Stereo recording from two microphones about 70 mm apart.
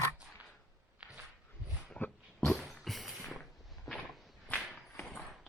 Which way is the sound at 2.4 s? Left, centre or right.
Centre.